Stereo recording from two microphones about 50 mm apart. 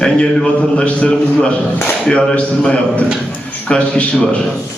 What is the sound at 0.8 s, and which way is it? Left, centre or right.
A man's voice, centre.